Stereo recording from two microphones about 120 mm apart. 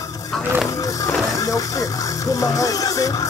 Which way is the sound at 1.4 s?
25° left (ahead or behind).